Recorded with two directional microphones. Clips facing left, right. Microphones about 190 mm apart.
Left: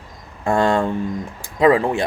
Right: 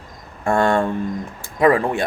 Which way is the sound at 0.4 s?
20° left (ahead or behind).